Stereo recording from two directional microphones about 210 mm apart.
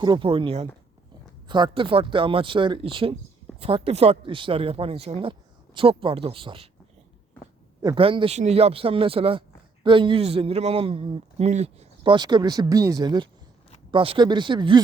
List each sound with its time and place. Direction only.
0.0 s a man's voice: 25° right (ahead or behind)
7.8 s a man's voice: 20° right (ahead or behind)